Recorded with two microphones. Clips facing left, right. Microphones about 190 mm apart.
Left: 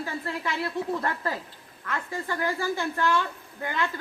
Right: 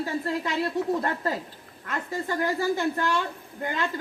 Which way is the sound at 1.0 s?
25° right (ahead or behind).